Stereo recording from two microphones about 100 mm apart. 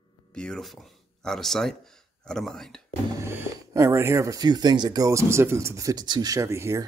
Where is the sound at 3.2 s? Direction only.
30° right (ahead or behind); by 5.1 s 45° right (ahead or behind).